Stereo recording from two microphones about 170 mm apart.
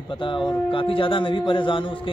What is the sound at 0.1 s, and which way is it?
A man's voice, 30° left (ahead or behind).